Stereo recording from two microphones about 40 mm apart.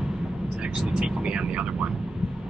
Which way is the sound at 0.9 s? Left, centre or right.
Right.